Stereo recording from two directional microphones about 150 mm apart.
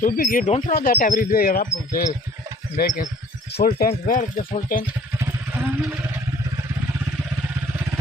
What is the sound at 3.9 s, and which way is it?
Speech, 60° left (ahead or behind).